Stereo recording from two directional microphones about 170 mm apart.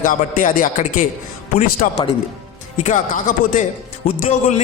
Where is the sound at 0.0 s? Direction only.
50° left (ahead or behind).